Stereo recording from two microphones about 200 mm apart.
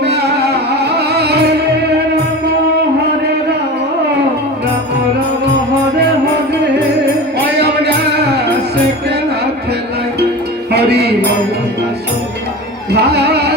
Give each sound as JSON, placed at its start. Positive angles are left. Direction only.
{"t": 0.0, "sound": "music", "side_deg": -55}
{"t": 7.3, "sound": "music", "side_deg": -55}
{"t": 10.7, "sound": "music", "side_deg": -55}
{"t": 12.9, "sound": "carnatic music", "side_deg": -55}